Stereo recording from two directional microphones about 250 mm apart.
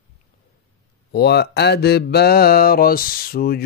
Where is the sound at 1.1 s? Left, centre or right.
Left.